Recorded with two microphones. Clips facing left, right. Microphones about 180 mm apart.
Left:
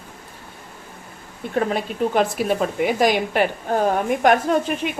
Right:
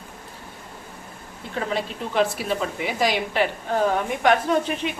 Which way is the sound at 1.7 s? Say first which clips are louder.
Left 5 dB; 45° left (ahead or behind).